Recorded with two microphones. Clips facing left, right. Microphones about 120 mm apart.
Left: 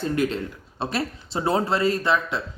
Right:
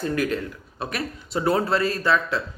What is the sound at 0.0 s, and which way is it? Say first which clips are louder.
A man's voice: even; 25° left (ahead or behind).